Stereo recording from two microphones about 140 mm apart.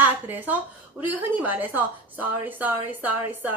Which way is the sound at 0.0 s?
10° right (ahead or behind).